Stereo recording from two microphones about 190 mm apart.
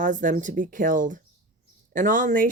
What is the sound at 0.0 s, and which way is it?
Speech, 40° right (ahead or behind).